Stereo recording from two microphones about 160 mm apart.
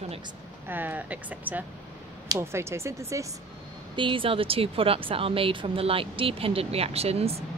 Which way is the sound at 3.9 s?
30° right (ahead or behind).